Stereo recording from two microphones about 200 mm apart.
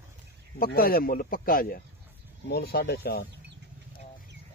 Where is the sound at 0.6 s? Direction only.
50° left (ahead or behind).